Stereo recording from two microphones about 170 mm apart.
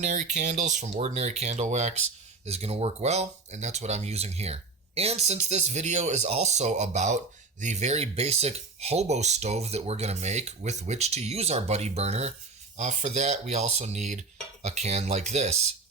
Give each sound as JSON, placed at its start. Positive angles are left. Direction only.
{"t": 0.0, "sound": "speech", "side_deg": -45}